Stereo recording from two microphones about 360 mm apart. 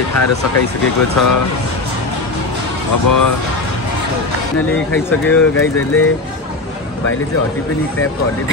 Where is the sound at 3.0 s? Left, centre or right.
Left.